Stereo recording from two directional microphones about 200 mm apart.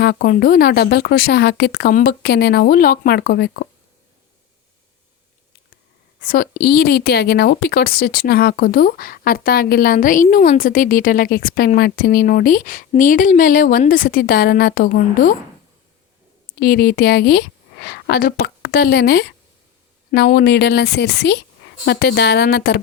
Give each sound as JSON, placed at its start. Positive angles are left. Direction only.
{"t": 0.0, "sound": "a woman's voice", "side_deg": 50}
{"t": 6.2, "sound": "a woman's voice", "side_deg": 45}
{"t": 16.6, "sound": "a woman's voice", "side_deg": 50}